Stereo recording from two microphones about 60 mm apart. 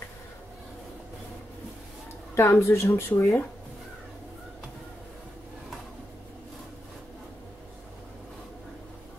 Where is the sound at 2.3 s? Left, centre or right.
Left.